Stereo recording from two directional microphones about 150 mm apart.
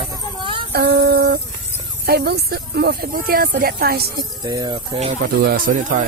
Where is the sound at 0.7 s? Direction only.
90° right.